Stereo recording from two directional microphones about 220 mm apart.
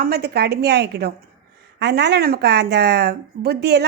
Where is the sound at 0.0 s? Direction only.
45° right (ahead or behind).